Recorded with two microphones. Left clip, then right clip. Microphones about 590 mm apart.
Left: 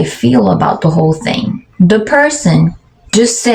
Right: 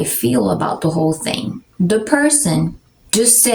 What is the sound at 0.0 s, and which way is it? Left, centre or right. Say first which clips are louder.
Speech: left 6 dB; right.